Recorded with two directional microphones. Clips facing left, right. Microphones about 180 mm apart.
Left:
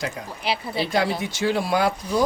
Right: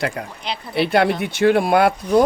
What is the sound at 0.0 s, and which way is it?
Speech, 65° right (ahead or behind).